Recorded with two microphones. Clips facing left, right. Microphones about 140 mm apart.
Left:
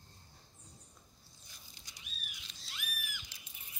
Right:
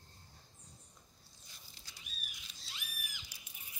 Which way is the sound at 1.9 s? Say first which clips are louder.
Even; 15° left (ahead or behind).